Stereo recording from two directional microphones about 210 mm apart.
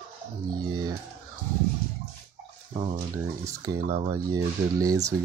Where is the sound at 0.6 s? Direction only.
20° right (ahead or behind).